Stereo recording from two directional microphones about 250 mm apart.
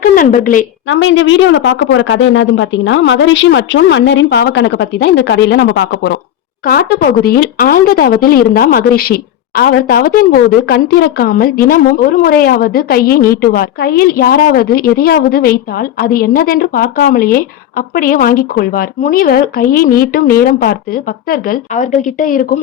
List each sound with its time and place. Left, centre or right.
0.0 s a woman's voice: left
0.9 s speech: left